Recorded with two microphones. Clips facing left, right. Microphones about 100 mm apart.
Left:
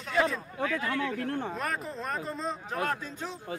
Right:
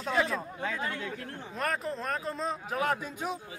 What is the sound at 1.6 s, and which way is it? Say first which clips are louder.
A man's voice: right 2 dB; centre (ahead or behind).